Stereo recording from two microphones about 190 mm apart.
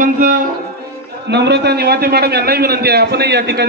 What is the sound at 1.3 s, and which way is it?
A man's voice, 65° right (ahead or behind).